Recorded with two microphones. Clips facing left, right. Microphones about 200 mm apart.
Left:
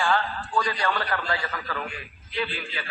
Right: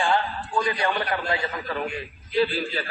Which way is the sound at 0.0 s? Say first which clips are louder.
Right 1 dB; 20° right (ahead or behind).